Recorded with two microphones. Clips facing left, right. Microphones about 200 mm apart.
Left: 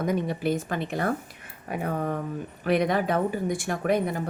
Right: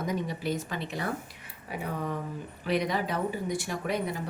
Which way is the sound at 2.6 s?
55° left (ahead or behind).